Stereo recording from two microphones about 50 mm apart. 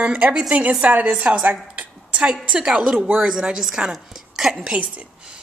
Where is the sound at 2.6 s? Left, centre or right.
Centre.